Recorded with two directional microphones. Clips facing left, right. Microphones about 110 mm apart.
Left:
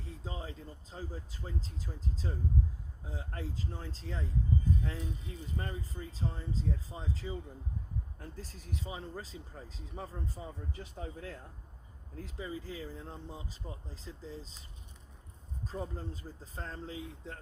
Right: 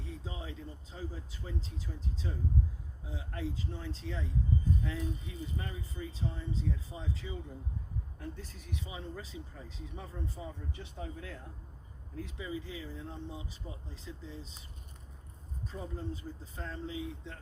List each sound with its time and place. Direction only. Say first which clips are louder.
0.0 s speech: even; 40° left (ahead or behind)
15.7 s speech: left 1 dB; 40° left (ahead or behind)